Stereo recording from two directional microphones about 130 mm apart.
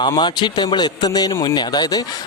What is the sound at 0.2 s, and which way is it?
A man's voice, 35° left (ahead or behind).